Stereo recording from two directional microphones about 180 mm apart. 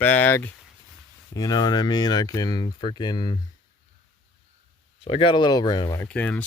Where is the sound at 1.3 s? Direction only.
20° left (ahead or behind).